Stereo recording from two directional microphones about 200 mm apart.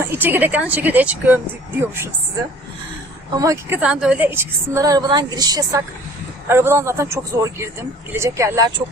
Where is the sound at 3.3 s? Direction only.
15° right (ahead or behind).